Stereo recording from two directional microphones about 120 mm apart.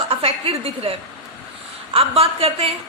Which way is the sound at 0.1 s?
50° right (ahead or behind).